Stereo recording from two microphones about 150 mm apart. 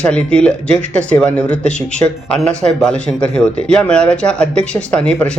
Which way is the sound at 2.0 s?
25° left (ahead or behind).